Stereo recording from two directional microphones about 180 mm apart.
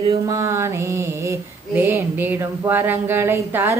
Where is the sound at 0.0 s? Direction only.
20° right (ahead or behind).